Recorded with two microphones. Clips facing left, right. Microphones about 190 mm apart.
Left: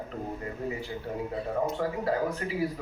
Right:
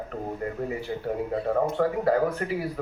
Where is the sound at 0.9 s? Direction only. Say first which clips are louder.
Right 5 dB; 45° right (ahead or behind).